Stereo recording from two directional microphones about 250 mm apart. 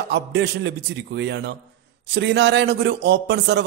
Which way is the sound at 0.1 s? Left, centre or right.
Right.